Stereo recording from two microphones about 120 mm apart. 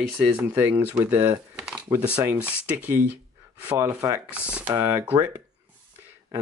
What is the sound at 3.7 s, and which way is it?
Rub, 25° right (ahead or behind).